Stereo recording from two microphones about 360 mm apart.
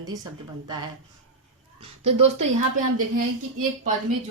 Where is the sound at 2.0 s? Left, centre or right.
Right.